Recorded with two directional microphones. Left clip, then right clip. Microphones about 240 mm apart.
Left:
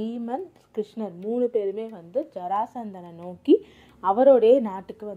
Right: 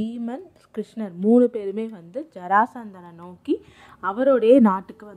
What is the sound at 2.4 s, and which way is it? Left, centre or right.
Speech, right.